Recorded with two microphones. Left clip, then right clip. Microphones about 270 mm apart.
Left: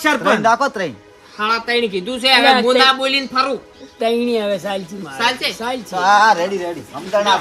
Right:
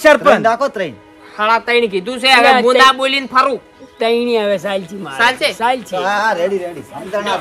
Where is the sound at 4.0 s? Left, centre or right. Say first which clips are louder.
Right 3 dB; right.